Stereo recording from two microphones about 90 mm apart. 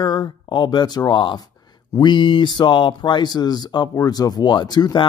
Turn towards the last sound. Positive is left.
turn(degrees=50)  # may be behind; listen again after turning